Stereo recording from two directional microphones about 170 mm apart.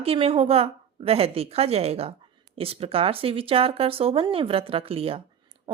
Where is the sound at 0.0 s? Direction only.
35° right (ahead or behind).